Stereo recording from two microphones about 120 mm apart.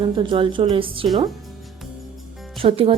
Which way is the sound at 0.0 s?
45° right (ahead or behind).